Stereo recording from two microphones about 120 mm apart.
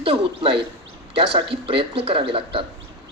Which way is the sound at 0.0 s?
50° right (ahead or behind).